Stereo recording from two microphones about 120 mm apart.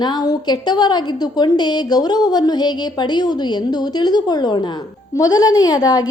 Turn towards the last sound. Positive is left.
turn(degrees=30)  # may be behind; listen again after turning